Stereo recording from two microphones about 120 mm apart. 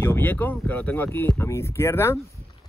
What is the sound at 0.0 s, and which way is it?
Speech, 15° left (ahead or behind).